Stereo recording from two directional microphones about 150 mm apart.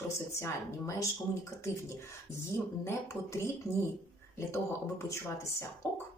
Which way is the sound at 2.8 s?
15° left (ahead or behind).